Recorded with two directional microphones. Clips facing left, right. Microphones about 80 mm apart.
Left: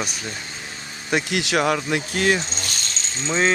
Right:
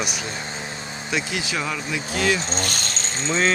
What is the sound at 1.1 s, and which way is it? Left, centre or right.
Speech, left.